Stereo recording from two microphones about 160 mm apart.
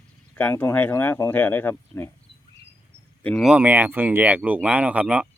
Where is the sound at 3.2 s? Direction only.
5° left (ahead or behind).